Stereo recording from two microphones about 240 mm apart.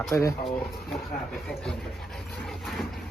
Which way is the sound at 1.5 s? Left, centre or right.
Centre.